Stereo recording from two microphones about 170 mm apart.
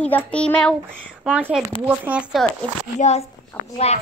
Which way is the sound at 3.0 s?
40° left (ahead or behind).